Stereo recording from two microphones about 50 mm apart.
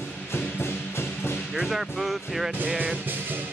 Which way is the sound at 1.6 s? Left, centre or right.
Centre.